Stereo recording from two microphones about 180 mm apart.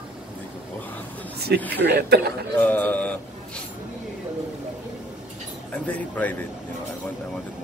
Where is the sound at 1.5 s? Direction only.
65° right (ahead or behind).